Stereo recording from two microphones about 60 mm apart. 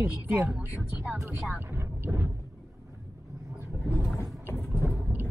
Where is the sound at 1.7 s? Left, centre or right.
Right.